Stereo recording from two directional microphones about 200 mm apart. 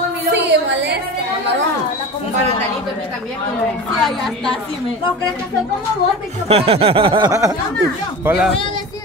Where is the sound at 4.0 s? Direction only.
Centre (ahead or behind).